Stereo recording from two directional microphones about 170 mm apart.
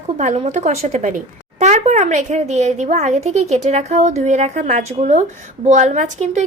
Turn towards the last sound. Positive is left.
turn(degrees=-45)  # may be behind; listen again after turning